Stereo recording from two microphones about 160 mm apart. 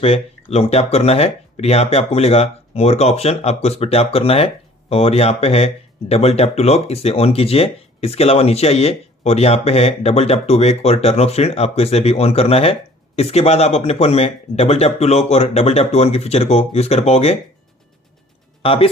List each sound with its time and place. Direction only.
0.0 s speech: 40° left (ahead or behind)
18.6 s speech: 35° left (ahead or behind)